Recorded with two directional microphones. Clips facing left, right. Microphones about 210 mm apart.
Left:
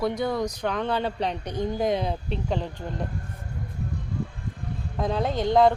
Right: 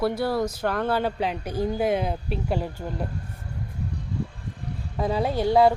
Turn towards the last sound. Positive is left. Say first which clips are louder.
# right 1 dB
turn(degrees=-10)  # may be behind; listen again after turning